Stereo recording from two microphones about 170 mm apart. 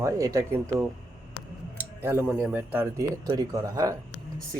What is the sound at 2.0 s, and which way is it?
Speech, 15° right (ahead or behind).